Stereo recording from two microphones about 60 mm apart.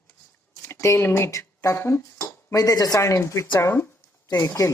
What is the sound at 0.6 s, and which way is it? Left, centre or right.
Speech, left.